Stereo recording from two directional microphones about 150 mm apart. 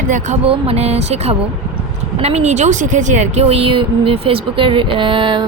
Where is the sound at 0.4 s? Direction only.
40° right (ahead or behind).